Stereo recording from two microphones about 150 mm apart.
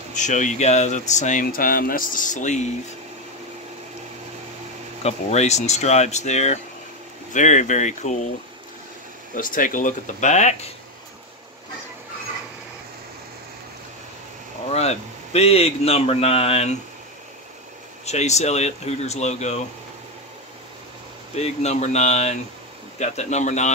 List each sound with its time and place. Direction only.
0.1 s speech: 55° left (ahead or behind)
5.0 s speech: 45° left (ahead or behind)
9.3 s speech: 65° left (ahead or behind)
14.7 s speech: 45° left (ahead or behind)
18.0 s speech: 50° left (ahead or behind)
21.4 s speech: 50° left (ahead or behind)